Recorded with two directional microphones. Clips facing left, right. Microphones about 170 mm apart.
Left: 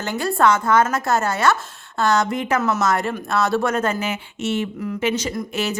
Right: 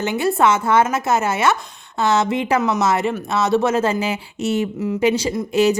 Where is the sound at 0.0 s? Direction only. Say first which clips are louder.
Right 2 dB; 20° right (ahead or behind).